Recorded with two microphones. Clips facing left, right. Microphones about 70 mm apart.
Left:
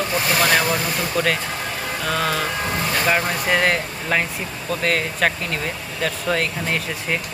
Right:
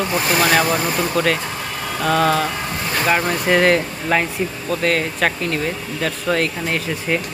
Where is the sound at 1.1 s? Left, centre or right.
Centre.